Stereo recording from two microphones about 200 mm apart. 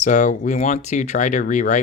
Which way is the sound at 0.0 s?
35° left (ahead or behind).